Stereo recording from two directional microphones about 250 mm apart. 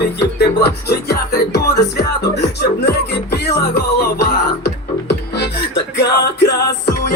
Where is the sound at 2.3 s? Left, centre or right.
Left.